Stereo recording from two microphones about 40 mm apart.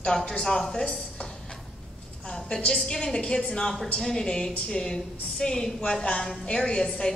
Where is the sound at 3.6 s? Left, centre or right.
Centre.